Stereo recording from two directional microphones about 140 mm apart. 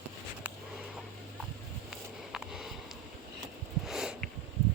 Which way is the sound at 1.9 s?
5° right (ahead or behind).